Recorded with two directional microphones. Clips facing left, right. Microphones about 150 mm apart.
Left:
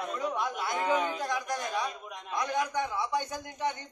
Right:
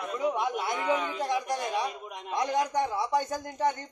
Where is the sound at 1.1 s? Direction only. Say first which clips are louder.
Right 3 dB; 25° right (ahead or behind).